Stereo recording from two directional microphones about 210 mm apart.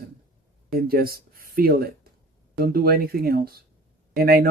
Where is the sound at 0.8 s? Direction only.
45° right (ahead or behind).